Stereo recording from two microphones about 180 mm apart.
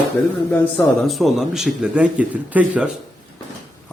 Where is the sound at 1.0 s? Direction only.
Centre (ahead or behind).